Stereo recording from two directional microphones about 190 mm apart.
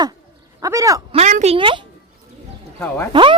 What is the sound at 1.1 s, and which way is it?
Speech, 35° right (ahead or behind).